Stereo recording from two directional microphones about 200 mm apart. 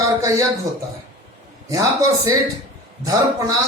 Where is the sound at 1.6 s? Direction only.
15° right (ahead or behind).